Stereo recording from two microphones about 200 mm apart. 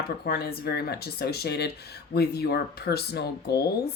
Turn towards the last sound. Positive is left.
turn(degrees=55)  # may be behind; listen again after turning